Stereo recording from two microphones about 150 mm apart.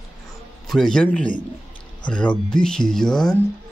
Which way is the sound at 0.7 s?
5° left (ahead or behind).